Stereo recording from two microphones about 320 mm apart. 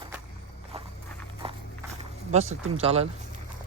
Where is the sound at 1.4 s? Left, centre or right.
Centre.